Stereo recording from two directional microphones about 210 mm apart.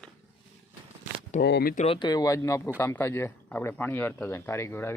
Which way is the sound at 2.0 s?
20° left (ahead or behind).